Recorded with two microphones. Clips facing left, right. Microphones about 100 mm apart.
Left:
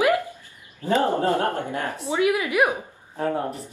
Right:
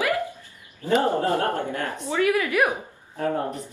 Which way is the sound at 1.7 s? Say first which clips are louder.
Left 1 dB; 15° left (ahead or behind).